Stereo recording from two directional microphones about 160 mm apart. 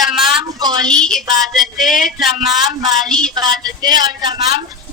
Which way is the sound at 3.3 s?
25° right (ahead or behind).